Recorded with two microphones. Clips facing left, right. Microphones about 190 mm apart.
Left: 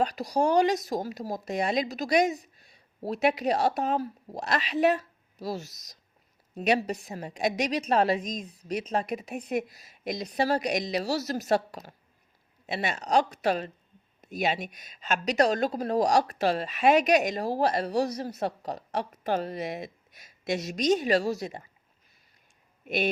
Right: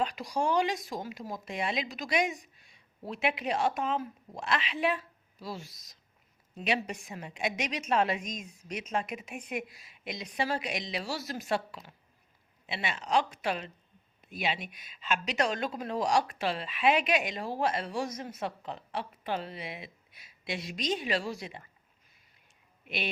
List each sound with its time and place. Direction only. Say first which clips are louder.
0.0 s a woman's voice: left 5 dB; 40° left (ahead or behind)
22.8 s speech: left 8 dB; 45° left (ahead or behind)